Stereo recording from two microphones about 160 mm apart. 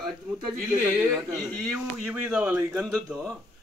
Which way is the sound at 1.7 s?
5° right (ahead or behind).